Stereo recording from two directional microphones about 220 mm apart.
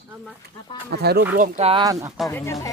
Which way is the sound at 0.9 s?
45° right (ahead or behind).